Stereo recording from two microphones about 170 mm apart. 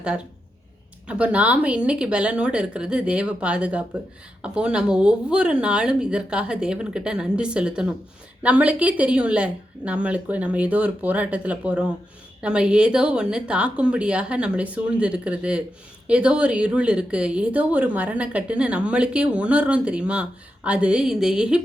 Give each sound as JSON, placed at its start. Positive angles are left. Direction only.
{"t": 1.0, "sound": "a woman's voice", "side_deg": -10}